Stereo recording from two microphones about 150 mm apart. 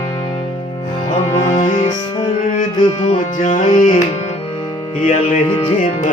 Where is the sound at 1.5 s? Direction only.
55° left (ahead or behind).